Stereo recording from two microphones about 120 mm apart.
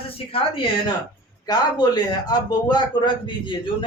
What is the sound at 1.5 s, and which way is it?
Speech, 35° left (ahead or behind).